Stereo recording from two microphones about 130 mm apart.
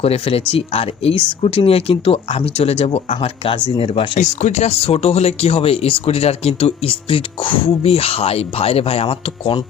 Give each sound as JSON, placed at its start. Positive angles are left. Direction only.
{"t": 0.0, "sound": "speech", "side_deg": 50}
{"t": 4.2, "sound": "speech", "side_deg": 65}